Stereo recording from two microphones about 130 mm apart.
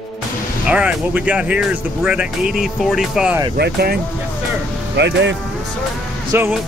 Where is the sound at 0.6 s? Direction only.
10° right (ahead or behind).